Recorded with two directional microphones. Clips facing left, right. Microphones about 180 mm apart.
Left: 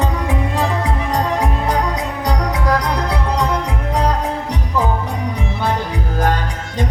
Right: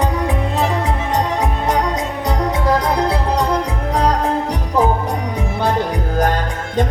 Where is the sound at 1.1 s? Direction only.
20° right (ahead or behind).